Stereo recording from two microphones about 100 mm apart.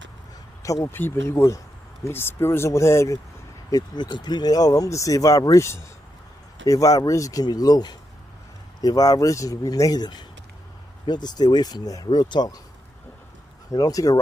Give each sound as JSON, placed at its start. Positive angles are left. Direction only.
{"t": 0.9, "sound": "speech", "side_deg": 25}
{"t": 3.7, "sound": "speech", "side_deg": 45}
{"t": 13.7, "sound": "speech", "side_deg": 35}